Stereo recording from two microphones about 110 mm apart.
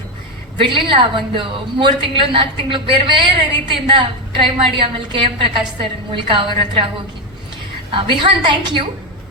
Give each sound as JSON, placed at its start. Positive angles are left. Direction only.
{"t": 0.7, "sound": "a woman's voice", "side_deg": -50}
{"t": 7.9, "sound": "a woman's voice", "side_deg": -50}